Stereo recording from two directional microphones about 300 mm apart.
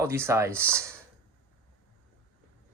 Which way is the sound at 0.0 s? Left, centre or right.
Centre.